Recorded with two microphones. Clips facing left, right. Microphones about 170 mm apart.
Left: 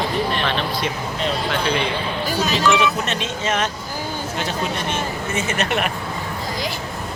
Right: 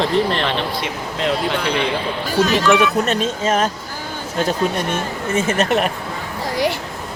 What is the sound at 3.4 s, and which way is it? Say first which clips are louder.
Speech: right 4 dB; 35° right (ahead or behind).